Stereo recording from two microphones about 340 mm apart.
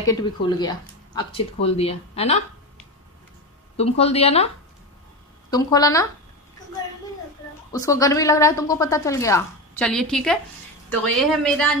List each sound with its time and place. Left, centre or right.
0.0 s a woman's voice: centre
3.7 s a woman's voice: centre
5.5 s a woman's voice: centre
7.7 s a woman's voice: centre